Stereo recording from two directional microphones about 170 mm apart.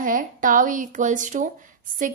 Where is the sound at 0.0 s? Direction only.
55° right (ahead or behind).